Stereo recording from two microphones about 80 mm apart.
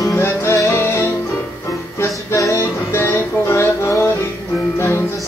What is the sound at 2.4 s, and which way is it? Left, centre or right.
Music, left.